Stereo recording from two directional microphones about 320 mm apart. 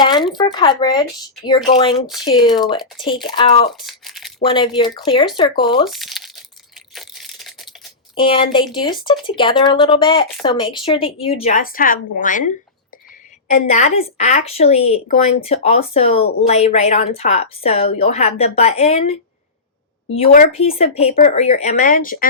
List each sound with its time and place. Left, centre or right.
0.0 s a sound: centre
0.3 s speech: centre
3.8 s crumpling: centre
4.4 s speech: centre
5.8 s speech: centre
6.9 s crushing: centre
8.1 s a woman's voice: centre
20.1 s a woman's voice: left